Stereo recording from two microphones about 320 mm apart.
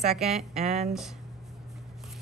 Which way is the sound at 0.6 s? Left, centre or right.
Centre.